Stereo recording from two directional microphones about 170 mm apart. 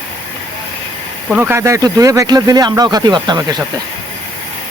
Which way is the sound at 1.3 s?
15° right (ahead or behind).